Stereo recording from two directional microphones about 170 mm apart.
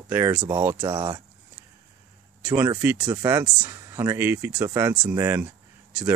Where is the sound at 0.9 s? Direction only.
25° right (ahead or behind).